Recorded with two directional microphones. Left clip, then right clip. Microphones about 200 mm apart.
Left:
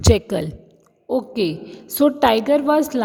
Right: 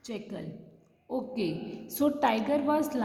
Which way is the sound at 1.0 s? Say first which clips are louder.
Left 12 dB; 35° left (ahead or behind).